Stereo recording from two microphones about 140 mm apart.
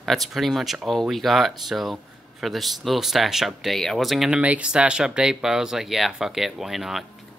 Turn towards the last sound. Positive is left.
turn(degrees=0)  # may be behind; listen again after turning